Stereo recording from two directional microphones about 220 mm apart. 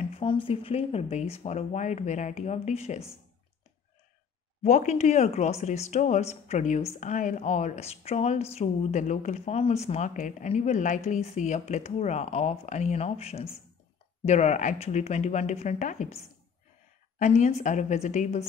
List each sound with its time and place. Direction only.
0.1 s speech: 25° left (ahead or behind)
4.6 s a woman's voice: 35° left (ahead or behind)
17.2 s a woman's voice: 30° left (ahead or behind)